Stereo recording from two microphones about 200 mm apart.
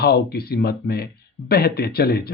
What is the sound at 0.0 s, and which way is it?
Speech, 50° left (ahead or behind).